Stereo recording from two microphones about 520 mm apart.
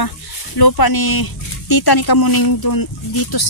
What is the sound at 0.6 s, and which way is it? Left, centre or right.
Speech, left.